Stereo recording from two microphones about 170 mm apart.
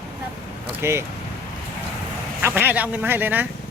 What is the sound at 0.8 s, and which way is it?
Speech, 15° right (ahead or behind).